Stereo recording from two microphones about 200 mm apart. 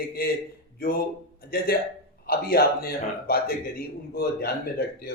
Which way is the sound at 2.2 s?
50° left (ahead or behind).